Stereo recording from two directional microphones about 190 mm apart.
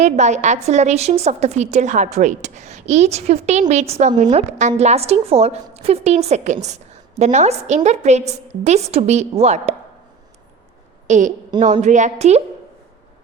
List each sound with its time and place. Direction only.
0.0 s a woman's voice: 40° right (ahead or behind)
11.0 s a woman's voice: 40° right (ahead or behind)